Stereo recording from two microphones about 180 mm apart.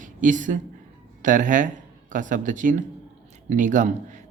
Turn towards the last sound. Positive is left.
turn(degrees=-45)  # may be behind; listen again after turning